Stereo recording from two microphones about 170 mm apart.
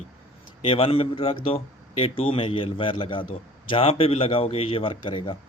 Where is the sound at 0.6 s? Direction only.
35° left (ahead or behind).